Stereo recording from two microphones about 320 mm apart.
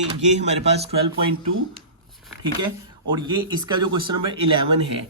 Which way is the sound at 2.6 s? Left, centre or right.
Centre.